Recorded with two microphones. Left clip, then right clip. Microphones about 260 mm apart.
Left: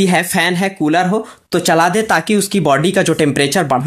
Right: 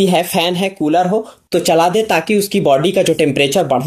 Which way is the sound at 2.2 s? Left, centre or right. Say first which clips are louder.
Right 1 dB; left.